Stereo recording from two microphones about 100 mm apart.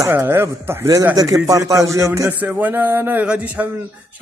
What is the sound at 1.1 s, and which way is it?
Speech, 35° right (ahead or behind).